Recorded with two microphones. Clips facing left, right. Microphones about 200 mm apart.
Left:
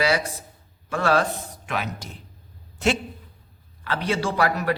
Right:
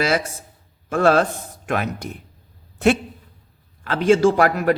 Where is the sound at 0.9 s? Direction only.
45° right (ahead or behind).